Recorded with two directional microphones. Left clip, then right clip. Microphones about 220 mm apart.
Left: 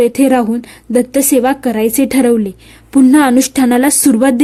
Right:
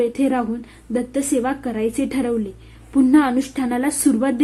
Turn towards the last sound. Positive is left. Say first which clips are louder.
# left 8 dB
turn(degrees=45)  # may be behind; listen again after turning